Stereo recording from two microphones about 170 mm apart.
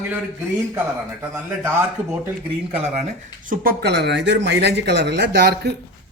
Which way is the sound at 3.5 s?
60° right (ahead or behind).